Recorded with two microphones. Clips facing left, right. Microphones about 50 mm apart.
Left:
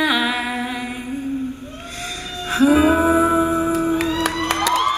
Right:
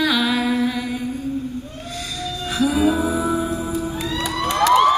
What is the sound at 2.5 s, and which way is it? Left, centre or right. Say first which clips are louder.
Music: left 4 dB; left.